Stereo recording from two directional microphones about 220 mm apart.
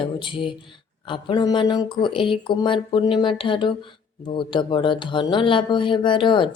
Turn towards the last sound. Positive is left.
turn(degrees=20)  # may be behind; listen again after turning